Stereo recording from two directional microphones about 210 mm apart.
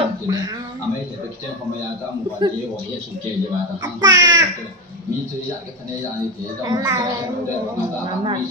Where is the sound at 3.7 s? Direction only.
20° right (ahead or behind).